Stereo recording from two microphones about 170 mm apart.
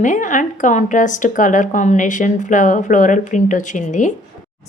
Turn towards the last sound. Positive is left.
turn(degrees=45)  # may be behind; listen again after turning